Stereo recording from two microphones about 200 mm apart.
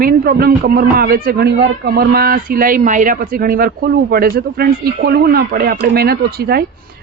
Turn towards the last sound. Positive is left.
turn(degrees=-50)  # may be behind; listen again after turning